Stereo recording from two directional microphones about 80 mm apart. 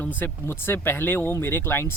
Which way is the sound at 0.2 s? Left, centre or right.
Left.